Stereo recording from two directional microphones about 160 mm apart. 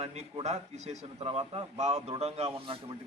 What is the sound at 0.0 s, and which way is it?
A man's voice, 45° right (ahead or behind).